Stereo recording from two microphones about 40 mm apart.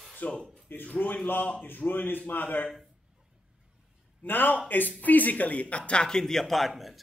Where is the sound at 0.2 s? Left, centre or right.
Left.